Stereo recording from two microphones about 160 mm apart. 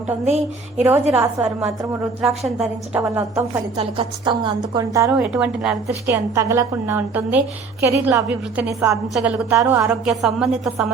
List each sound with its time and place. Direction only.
0.8 s a woman's voice: 15° right (ahead or behind)
2.2 s a woman's voice: centre (ahead or behind)
3.0 s a woman's voice: 20° right (ahead or behind)
3.8 s a woman's voice: 35° right (ahead or behind)
5.1 s a woman's voice: 5° right (ahead or behind)
6.1 s a woman's voice: 20° right (ahead or behind)
9.9 s a woman's voice: centre (ahead or behind)